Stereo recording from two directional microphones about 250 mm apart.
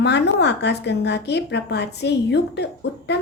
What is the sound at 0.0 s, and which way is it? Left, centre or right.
A woman's voice, left.